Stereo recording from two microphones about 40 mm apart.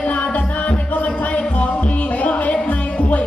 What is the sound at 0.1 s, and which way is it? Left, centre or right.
Music, left.